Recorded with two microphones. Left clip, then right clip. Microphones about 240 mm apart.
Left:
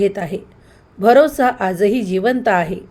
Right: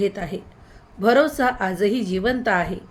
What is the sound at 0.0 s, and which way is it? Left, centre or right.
A woman's voice, left.